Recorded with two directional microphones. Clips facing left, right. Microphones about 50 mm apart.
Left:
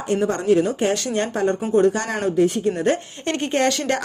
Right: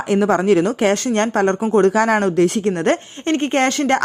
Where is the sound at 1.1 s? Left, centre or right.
Right.